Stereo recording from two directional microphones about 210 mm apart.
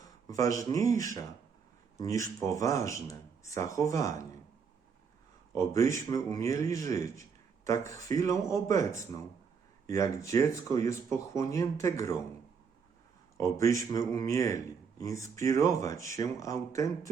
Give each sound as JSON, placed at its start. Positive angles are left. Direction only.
{"t": 0.0, "sound": "a man's voice", "side_deg": 15}
{"t": 5.5, "sound": "a man's voice", "side_deg": 15}
{"t": 13.3, "sound": "a man's voice", "side_deg": 15}